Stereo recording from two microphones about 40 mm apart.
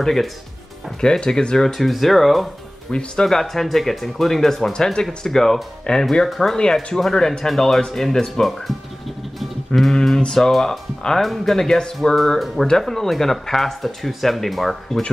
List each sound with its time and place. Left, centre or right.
0.0 s speech: centre
1.7 s speech: centre
2.9 s speech: left
3.3 s speech: centre
4.7 s speech: centre
6.5 s speech: centre
9.7 s a sound: left
10.0 s speech: centre